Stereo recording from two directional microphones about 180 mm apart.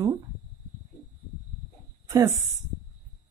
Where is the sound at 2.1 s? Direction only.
20° right (ahead or behind).